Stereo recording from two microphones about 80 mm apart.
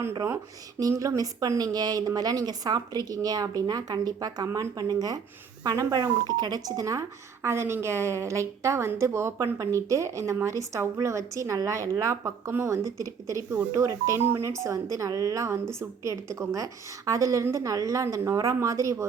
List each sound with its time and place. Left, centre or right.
0.8 s a woman's voice: right
7.4 s a woman's voice: right